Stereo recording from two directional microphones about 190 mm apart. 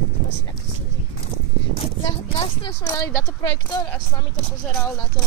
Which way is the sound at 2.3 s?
30° left (ahead or behind).